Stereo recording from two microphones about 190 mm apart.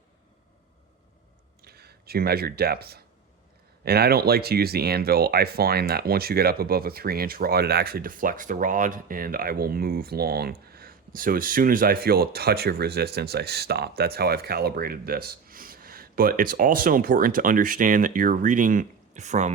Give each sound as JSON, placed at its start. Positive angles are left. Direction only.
{"t": 1.6, "sound": "speech", "side_deg": -55}